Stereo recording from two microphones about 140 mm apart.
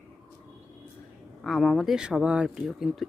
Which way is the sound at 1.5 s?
Centre (ahead or behind).